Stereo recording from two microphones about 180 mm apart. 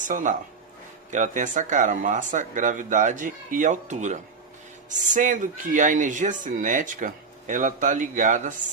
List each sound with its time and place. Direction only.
0.0 s speech: 45° right (ahead or behind)